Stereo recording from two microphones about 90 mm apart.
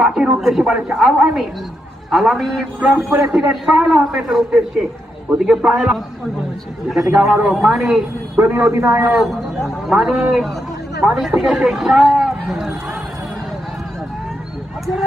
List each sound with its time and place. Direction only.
0.0 s a man's voice: 5° right (ahead or behind)
2.8 s a man's voice: 10° right (ahead or behind)
7.2 s a man's voice: 10° right (ahead or behind)
8.4 s a man's voice: 20° right (ahead or behind)
9.0 s a man's voice: 5° right (ahead or behind)